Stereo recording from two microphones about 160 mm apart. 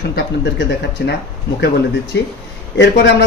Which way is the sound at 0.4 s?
90° left.